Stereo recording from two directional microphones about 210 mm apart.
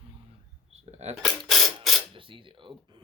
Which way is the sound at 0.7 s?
30° right (ahead or behind).